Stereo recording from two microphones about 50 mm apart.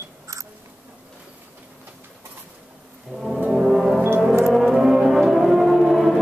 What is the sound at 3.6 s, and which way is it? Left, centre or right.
Brass instrument, centre.